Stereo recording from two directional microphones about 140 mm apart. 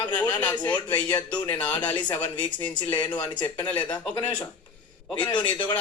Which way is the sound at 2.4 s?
35° left (ahead or behind).